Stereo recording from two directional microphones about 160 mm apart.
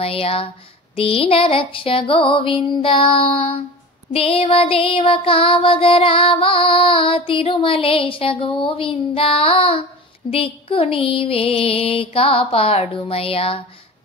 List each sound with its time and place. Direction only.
0.0 s music: 35° left (ahead or behind)